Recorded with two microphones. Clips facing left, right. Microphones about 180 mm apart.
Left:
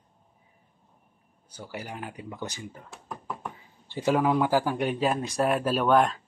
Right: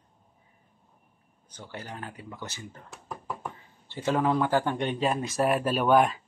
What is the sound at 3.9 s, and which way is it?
Speech, 10° left (ahead or behind).